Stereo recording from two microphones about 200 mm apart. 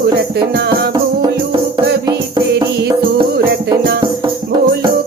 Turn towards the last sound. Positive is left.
turn(degrees=-55)  # may be behind; listen again after turning